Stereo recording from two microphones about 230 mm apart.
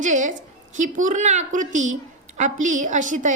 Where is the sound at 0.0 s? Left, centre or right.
Right.